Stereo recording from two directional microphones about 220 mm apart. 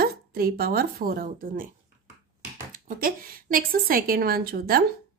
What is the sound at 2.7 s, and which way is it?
Speech, 40° right (ahead or behind).